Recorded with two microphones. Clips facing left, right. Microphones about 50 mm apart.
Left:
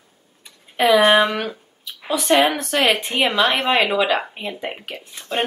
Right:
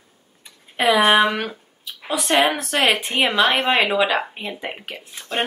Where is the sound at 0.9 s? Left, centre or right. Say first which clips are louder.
Left 1 dB; centre.